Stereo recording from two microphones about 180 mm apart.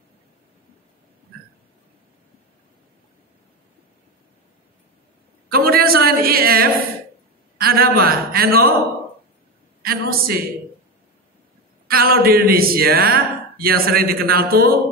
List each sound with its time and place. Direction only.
5.5 s a sound: 55° right (ahead or behind)
7.6 s a man's voice: 55° right (ahead or behind)
9.8 s speech: 55° right (ahead or behind)
11.9 s speech: 55° right (ahead or behind)